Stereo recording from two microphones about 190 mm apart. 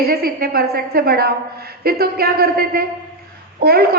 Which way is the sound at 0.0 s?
50° right (ahead or behind).